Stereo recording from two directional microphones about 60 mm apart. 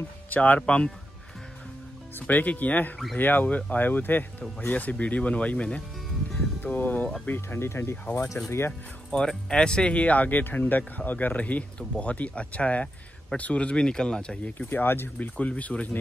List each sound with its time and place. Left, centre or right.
0.3 s speech: left
0.6 s speech: centre
2.1 s speech: left
7.2 s speech: left
9.1 s speech: centre
14.8 s speech: left
15.1 s speech: left